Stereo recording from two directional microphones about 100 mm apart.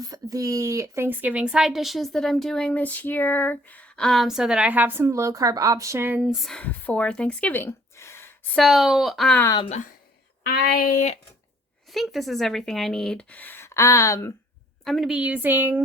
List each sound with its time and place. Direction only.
0.0 s a woman's voice: 35° right (ahead or behind); by 4.0 s 15° left (ahead or behind)
4.0 s a woman's voice: centre (ahead or behind); by 6.2 s 20° right (ahead or behind)
6.2 s a woman's voice: 5° right (ahead or behind)
6.5 s speech: 15° left (ahead or behind)
8.5 s a woman's voice: centre (ahead or behind)
11.9 s a woman's voice: centre (ahead or behind); by 14.3 s 30° left (ahead or behind)
14.8 s a woman's voice: centre (ahead or behind)
15.2 s a woman's voice: 15° right (ahead or behind)